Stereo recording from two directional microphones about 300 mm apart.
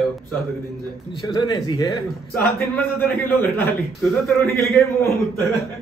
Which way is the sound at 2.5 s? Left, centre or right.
Centre.